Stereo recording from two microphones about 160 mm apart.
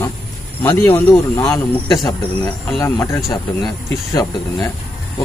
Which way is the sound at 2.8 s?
15° left (ahead or behind).